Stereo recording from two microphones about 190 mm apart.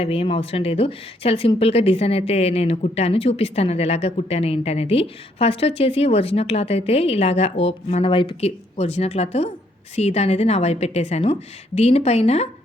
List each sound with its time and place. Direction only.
0.0 s a woman's voice: 30° left (ahead or behind)